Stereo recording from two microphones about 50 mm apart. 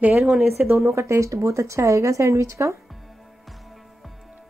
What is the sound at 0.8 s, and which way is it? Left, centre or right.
Speech, right.